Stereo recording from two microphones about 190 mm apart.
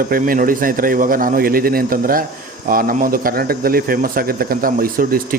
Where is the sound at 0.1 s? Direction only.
45° right (ahead or behind).